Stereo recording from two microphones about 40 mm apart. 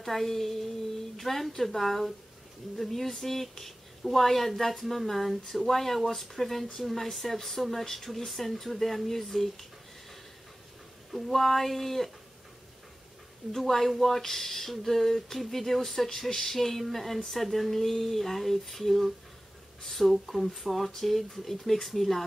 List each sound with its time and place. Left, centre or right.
0.0 s speech: centre
11.1 s speech: centre
13.5 s speech: centre